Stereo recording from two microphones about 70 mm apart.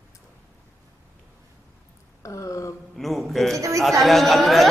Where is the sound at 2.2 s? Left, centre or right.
Left.